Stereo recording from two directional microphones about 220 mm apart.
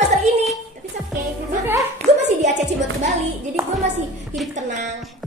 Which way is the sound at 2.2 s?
35° right (ahead or behind).